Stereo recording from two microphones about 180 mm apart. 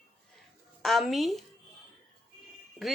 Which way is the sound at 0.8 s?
Centre (ahead or behind).